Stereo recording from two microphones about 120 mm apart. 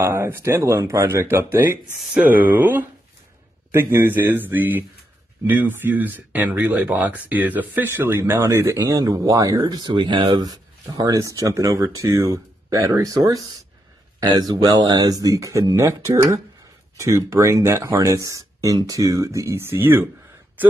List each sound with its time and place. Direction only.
0.0 s speech: 20° right (ahead or behind)
2.0 s speech: centre (ahead or behind)
2.2 s speech: 15° right (ahead or behind)